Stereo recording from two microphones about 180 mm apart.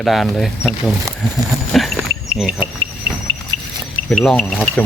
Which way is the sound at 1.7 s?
Centre (ahead or behind).